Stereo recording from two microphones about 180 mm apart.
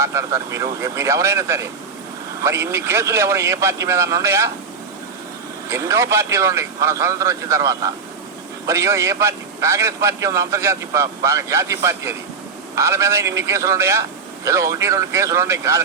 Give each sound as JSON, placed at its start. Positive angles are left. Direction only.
{"t": 0.0, "sound": "a man's voice", "side_deg": -15}
{"t": 5.6, "sound": "a man's voice", "side_deg": -15}